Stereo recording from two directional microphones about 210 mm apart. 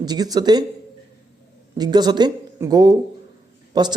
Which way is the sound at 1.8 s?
20° right (ahead or behind).